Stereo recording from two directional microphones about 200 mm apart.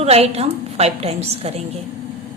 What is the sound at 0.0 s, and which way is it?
A woman's voice, 30° right (ahead or behind).